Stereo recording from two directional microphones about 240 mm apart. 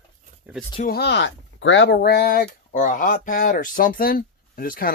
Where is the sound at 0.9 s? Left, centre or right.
Left.